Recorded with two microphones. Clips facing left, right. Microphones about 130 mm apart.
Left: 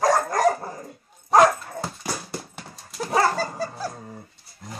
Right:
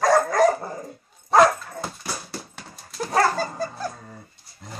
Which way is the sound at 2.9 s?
5° left (ahead or behind).